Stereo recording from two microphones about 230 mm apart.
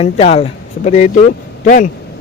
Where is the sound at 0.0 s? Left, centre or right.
Left.